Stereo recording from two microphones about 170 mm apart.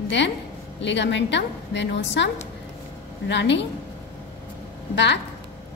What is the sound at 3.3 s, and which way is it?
Speech, 90° left.